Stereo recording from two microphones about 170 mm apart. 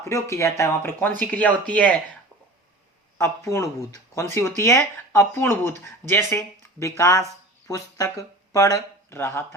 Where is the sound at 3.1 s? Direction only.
15° left (ahead or behind).